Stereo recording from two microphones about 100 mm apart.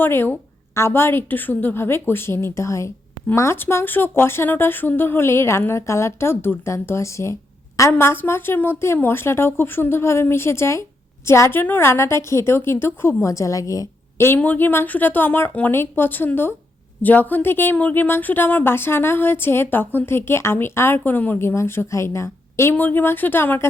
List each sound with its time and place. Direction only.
0.0 s speech: 20° left (ahead or behind)
14.3 s speech: 15° left (ahead or behind)
22.7 s speech: 20° left (ahead or behind)